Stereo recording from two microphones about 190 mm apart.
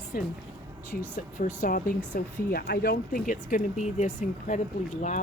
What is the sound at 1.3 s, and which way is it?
Speech, 45° left (ahead or behind).